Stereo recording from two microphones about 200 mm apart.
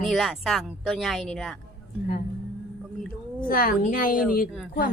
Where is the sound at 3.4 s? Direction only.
45° left (ahead or behind).